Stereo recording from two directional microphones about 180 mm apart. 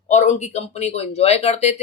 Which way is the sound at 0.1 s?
40° left (ahead or behind).